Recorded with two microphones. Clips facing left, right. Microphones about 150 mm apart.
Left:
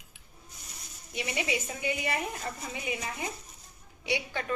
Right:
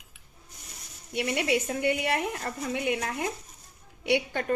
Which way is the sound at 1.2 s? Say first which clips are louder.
Right 6 dB; 60° right (ahead or behind).